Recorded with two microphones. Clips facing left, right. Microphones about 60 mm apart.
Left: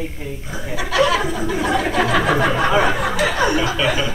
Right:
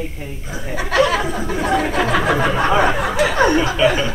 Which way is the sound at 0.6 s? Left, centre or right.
Right.